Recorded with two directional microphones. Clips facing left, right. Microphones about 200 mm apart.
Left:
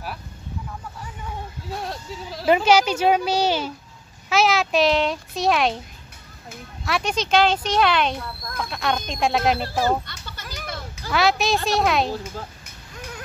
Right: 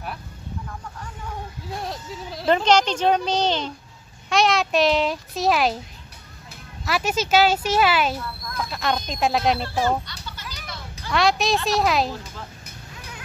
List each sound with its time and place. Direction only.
1.9 s speech: 5° left (ahead or behind)
6.8 s speech: 5° right (ahead or behind)
10.3 s a sound: 50° left (ahead or behind)
11.1 s speech: centre (ahead or behind)